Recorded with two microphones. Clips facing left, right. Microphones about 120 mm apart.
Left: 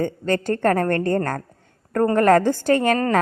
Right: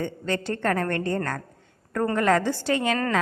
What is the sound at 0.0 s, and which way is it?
A woman's voice, 45° left (ahead or behind).